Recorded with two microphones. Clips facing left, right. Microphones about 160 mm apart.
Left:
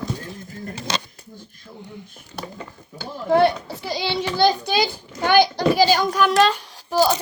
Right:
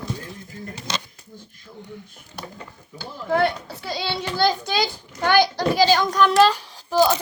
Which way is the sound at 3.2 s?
25° left (ahead or behind).